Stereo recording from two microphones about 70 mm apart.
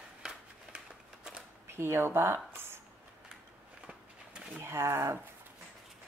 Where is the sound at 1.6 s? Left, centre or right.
Right.